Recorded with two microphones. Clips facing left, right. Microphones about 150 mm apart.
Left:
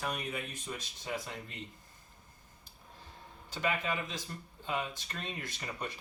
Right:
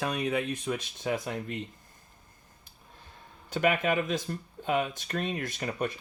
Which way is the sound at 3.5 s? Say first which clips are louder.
Right 8 dB; 65° right (ahead or behind).